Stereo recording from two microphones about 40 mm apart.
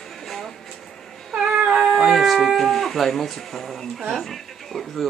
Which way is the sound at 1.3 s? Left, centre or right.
Centre.